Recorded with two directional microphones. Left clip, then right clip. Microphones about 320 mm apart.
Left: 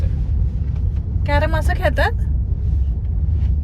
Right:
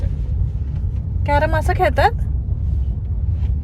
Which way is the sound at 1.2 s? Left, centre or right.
Right.